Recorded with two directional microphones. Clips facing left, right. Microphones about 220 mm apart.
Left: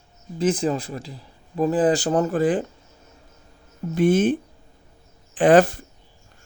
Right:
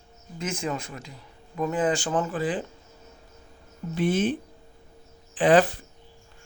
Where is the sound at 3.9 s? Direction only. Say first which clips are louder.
Left 6 dB; 50° left (ahead or behind).